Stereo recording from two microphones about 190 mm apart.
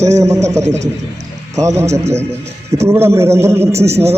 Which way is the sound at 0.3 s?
35° right (ahead or behind).